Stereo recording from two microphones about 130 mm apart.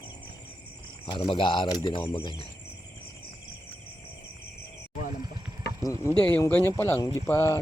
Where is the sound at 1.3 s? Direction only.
35° left (ahead or behind).